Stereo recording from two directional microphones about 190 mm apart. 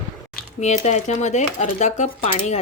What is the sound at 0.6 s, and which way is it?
Speech, 35° left (ahead or behind).